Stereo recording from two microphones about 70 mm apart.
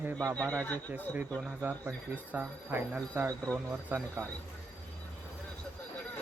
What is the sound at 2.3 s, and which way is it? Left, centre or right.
Speech, right.